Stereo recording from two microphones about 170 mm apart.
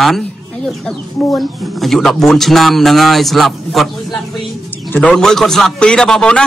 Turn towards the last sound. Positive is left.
turn(degrees=5)  # may be behind; listen again after turning